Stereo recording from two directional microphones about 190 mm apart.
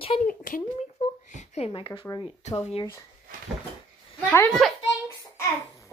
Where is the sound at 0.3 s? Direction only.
45° left (ahead or behind).